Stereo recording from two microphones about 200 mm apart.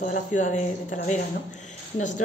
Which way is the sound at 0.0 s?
40° left (ahead or behind).